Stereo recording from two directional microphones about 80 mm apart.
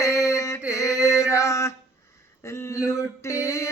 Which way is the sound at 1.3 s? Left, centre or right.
Left.